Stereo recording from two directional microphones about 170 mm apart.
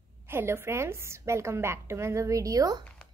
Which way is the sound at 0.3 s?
15° right (ahead or behind).